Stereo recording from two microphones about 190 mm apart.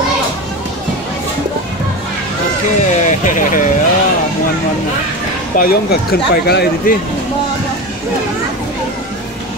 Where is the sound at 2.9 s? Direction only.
40° left (ahead or behind).